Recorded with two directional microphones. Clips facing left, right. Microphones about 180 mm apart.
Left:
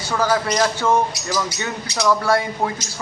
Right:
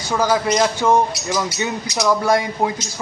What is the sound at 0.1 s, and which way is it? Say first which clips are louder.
Speech: right 2 dB; 15° right (ahead or behind).